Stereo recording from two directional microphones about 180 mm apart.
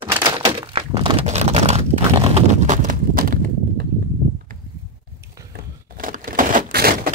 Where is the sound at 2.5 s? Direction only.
40° right (ahead or behind).